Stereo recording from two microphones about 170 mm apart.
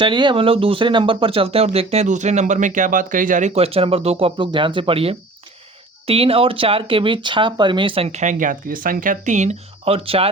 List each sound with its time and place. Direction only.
0.0 s speech: 30° right (ahead or behind)